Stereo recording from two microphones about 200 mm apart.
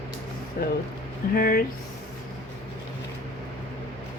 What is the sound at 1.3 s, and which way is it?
Speech, 45° left (ahead or behind).